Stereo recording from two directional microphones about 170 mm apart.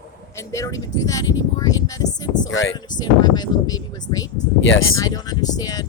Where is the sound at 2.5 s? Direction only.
90° left.